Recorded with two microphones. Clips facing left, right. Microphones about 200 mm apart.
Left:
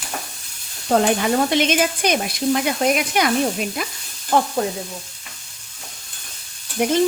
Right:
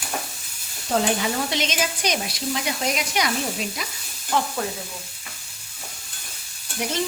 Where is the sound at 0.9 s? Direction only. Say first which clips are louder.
Left 5 dB; 55° left (ahead or behind).